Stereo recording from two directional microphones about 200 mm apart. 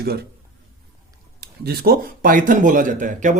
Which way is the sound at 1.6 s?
45° right (ahead or behind).